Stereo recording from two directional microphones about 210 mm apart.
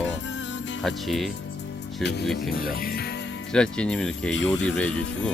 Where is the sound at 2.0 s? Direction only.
55° left (ahead or behind).